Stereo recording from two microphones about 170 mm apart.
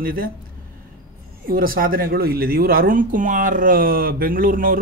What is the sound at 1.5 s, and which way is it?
Speech, 60° right (ahead or behind).